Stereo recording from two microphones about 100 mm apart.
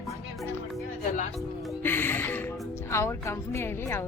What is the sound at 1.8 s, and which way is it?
Speech, 20° left (ahead or behind).